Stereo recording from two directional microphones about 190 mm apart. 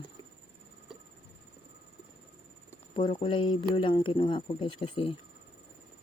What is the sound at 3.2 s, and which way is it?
Speech, 25° left (ahead or behind).